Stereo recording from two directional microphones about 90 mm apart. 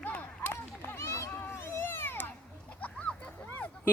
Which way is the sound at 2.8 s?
15° left (ahead or behind).